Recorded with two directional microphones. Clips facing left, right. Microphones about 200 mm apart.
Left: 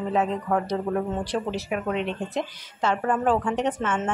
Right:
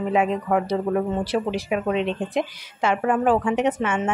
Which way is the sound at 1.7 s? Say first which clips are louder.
Right 4 dB; 20° right (ahead or behind).